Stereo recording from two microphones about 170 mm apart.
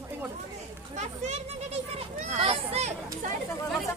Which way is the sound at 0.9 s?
45° right (ahead or behind).